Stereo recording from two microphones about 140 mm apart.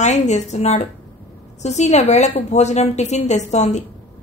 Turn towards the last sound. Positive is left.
turn(degrees=55)  # may be behind; listen again after turning